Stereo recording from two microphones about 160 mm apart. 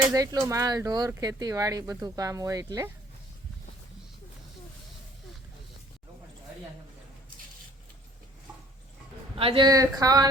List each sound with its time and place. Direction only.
0.1 s speech: 20° right (ahead or behind)
9.4 s speech: 30° right (ahead or behind)